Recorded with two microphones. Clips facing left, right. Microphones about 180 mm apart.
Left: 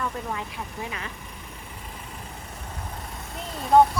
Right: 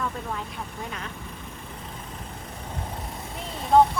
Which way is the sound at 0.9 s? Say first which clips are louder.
Even; 5° left (ahead or behind).